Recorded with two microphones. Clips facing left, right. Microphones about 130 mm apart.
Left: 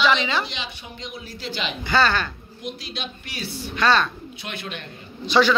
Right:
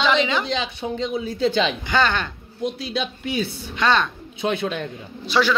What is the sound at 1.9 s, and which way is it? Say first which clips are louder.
Speech: even; 15° right (ahead or behind).